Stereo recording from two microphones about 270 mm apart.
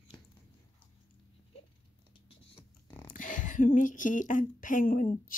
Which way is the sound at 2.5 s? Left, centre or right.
Centre.